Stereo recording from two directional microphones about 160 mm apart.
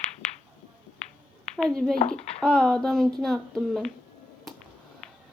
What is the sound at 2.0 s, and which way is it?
Speech, 40° left (ahead or behind).